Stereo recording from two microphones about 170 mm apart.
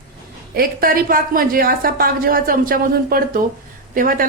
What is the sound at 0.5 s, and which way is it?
A woman's voice, 60° right (ahead or behind).